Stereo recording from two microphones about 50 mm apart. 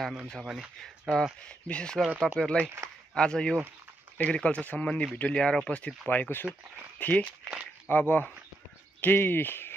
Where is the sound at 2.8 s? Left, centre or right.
Right.